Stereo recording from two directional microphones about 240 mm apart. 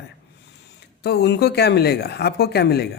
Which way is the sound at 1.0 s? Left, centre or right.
Left.